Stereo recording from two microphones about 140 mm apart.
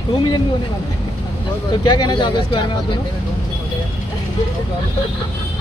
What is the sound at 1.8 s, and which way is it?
Speech, 30° left (ahead or behind).